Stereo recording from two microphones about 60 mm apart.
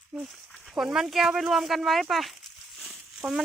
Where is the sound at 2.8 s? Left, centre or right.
Centre.